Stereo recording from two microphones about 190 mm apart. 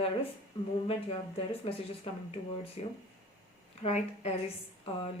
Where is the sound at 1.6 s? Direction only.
30° left (ahead or behind).